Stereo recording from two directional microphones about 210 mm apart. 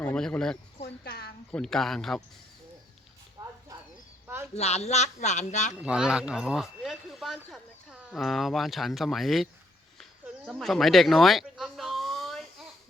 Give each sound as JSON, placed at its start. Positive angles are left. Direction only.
{"t": 0.0, "sound": "speech", "side_deg": 5}
{"t": 1.0, "sound": "a woman's voice", "side_deg": 50}
{"t": 1.5, "sound": "speech", "side_deg": 5}
{"t": 3.4, "sound": "a sound", "side_deg": -15}
{"t": 4.5, "sound": "speech", "side_deg": 30}
{"t": 5.8, "sound": "speech", "side_deg": -5}
{"t": 10.0, "sound": "a sound", "side_deg": 0}